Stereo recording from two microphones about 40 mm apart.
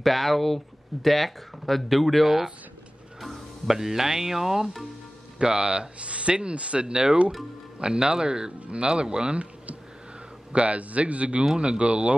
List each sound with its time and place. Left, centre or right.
0.0 s speech: centre
5.4 s a man's voice: right